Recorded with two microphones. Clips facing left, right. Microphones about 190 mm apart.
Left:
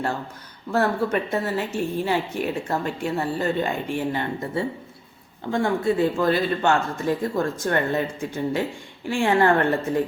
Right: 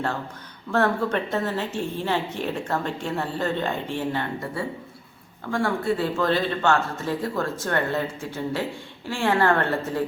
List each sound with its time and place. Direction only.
0.7 s a woman's voice: 10° left (ahead or behind)